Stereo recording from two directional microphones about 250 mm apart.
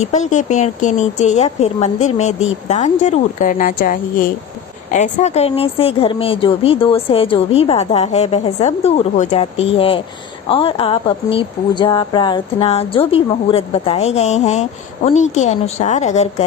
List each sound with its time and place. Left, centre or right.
0.0 s a woman's voice: left